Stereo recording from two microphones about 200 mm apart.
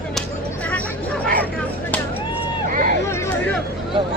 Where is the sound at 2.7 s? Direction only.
45° right (ahead or behind).